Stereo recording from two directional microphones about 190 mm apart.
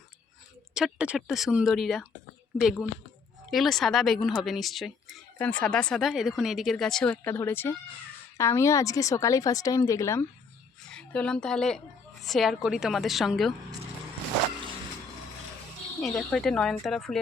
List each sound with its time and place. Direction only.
0.7 s a woman's voice: 5° right (ahead or behind)
16.0 s speech: centre (ahead or behind)